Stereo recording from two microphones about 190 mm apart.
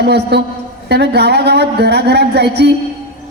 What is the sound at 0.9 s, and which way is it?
A woman's voice, 60° right (ahead or behind).